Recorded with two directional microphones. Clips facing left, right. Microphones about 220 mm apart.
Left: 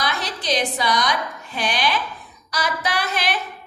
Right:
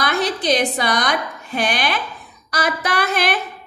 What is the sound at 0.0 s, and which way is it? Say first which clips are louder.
A woman's voice: right 6 dB; 55° right (ahead or behind).